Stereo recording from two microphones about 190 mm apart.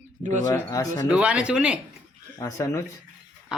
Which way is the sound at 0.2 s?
40° right (ahead or behind).